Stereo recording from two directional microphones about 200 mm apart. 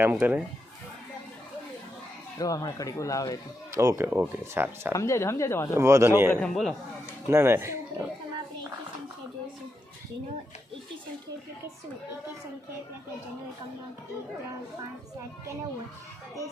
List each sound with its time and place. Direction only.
0.0 s speech: 10° right (ahead or behind)
2.4 s speech: 20° left (ahead or behind)
3.7 s speech: 15° right (ahead or behind)
4.9 s speech: 15° left (ahead or behind)
5.7 s speech: 15° right (ahead or behind)
6.3 s a man's voice: 5° left (ahead or behind)
7.3 s speech: 15° right (ahead or behind)